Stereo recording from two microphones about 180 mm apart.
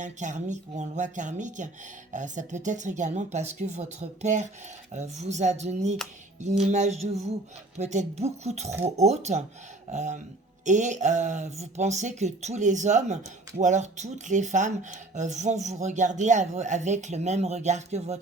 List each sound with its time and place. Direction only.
0.0 s speech: 45° right (ahead or behind)